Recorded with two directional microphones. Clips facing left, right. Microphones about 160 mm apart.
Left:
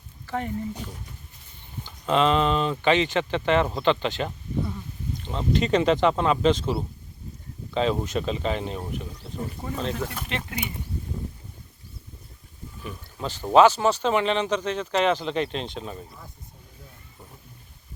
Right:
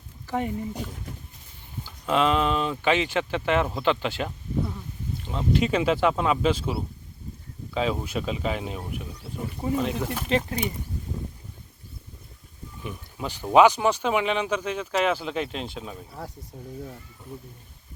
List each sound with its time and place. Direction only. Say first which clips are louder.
0.3 s speech: right 2 dB; 15° right (ahead or behind)
1.8 s speech: left 1 dB; 5° right (ahead or behind)
10.3 s speech: right 13 dB; 35° right (ahead or behind)
12.8 s a sound: even; 15° right (ahead or behind)
13.5 s speech: left 1 dB; 15° right (ahead or behind)